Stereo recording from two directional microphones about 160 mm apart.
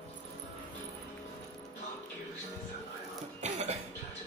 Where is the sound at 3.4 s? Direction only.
45° right (ahead or behind).